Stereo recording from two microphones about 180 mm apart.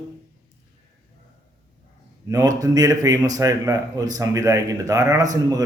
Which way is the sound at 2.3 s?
20° right (ahead or behind).